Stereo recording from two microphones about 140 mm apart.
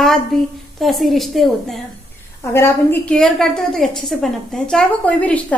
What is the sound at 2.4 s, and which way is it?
Speech, 15° left (ahead or behind).